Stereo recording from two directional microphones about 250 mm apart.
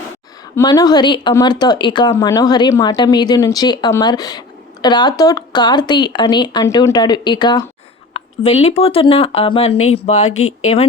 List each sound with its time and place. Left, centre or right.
0.5 s speech: centre
10.3 s speech: left